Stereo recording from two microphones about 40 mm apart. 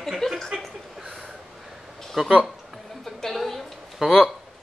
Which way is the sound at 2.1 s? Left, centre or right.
Centre.